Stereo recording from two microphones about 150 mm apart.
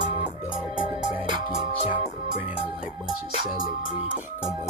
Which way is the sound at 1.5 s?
45° left (ahead or behind).